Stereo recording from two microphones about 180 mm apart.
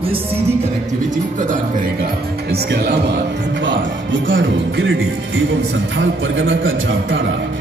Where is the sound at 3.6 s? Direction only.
90° right.